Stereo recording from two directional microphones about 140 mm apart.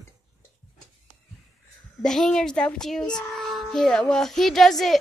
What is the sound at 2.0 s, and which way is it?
A woman's voice, 5° left (ahead or behind).